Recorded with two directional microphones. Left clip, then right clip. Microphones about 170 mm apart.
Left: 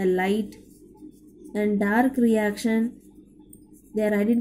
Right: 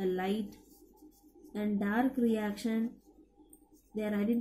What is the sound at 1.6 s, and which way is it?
A woman's voice, 40° left (ahead or behind).